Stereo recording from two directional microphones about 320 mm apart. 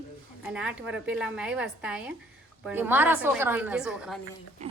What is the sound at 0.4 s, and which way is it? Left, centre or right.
A woman's voice, centre.